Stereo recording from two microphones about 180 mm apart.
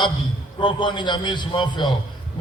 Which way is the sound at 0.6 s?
25° left (ahead or behind).